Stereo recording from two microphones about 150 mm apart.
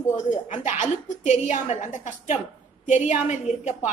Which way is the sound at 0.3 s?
55° left (ahead or behind).